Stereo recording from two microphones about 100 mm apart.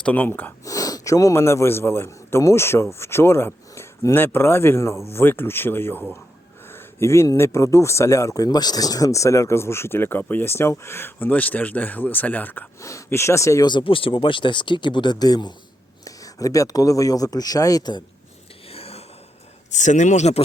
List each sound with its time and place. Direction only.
0.0 s speech: 15° left (ahead or behind)
0.6 s a man's voice: 35° left (ahead or behind); by 12.6 s 20° left (ahead or behind)
12.8 s speech: 30° left (ahead or behind)
13.7 s speech: 55° left (ahead or behind)
18.7 s a sound: 80° left